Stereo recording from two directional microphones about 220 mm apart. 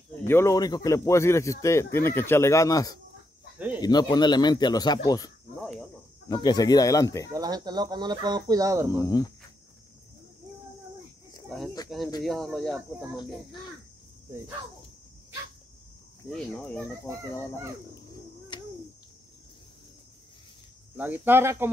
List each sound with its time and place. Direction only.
0.3 s speech: 15° left (ahead or behind)
3.5 s speech: 5° right (ahead or behind)
3.8 s speech: 20° left (ahead or behind)
5.6 s speech: centre (ahead or behind)
6.2 s speech: 15° left (ahead or behind)
7.2 s speech: 15° right (ahead or behind)
9.0 s speech: 15° left (ahead or behind)
11.4 s snake: centre (ahead or behind)
12.2 s speech: centre (ahead or behind)
16.3 s speech: 5° left (ahead or behind)
17.1 s speech: 15° right (ahead or behind)
20.9 s speech: 10° right (ahead or behind)